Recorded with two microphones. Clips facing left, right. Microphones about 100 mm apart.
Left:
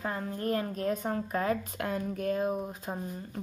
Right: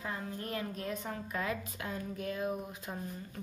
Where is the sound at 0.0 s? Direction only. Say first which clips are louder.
Left 6 dB; 45° left (ahead or behind).